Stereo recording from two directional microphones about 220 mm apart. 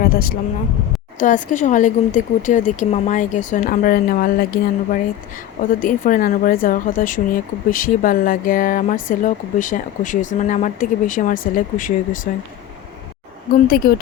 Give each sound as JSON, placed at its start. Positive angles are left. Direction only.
{"t": 0.0, "sound": "speech", "side_deg": 40}
{"t": 13.5, "sound": "speech", "side_deg": 40}